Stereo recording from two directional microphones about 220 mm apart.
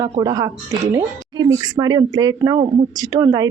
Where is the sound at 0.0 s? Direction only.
15° right (ahead or behind).